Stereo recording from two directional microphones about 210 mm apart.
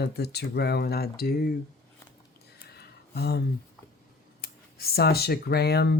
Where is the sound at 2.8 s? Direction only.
50° left (ahead or behind).